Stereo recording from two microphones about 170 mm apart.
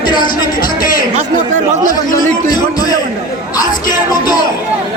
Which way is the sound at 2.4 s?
25° left (ahead or behind).